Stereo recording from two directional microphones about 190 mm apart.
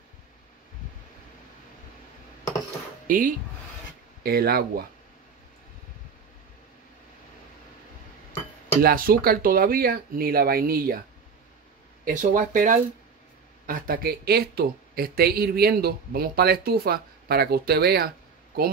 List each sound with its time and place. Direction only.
3.1 s speech: 45° right (ahead or behind)
8.8 s speech: 50° right (ahead or behind)
12.0 s speech: 45° right (ahead or behind)